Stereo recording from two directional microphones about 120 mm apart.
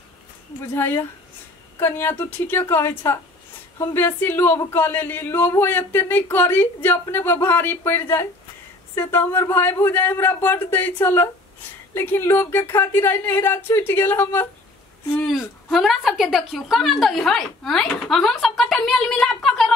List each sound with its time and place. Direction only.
0.7 s speech: 20° left (ahead or behind)
15.7 s a woman's voice: centre (ahead or behind)